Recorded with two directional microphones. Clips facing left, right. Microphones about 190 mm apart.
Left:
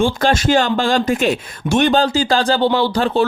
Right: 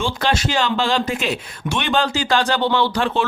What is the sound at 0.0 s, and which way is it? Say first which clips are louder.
Speech: left 5 dB; 50° left (ahead or behind).